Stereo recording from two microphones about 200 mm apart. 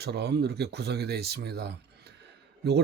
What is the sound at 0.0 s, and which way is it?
Speech, 55° right (ahead or behind).